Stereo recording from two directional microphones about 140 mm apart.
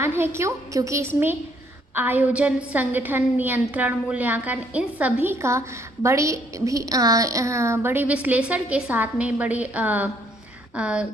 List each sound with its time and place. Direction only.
0.0 s a woman's voice: 20° right (ahead or behind)